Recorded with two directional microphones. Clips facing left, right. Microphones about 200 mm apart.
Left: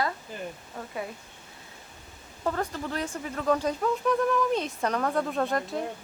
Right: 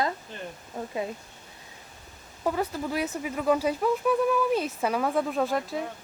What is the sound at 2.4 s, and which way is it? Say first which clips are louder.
Speech: right 2 dB; 10° right (ahead or behind).